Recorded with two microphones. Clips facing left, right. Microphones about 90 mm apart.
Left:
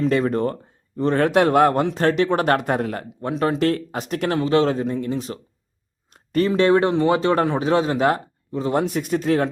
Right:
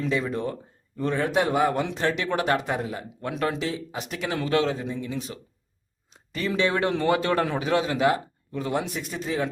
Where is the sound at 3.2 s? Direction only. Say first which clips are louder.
Left 6 dB; 30° left (ahead or behind).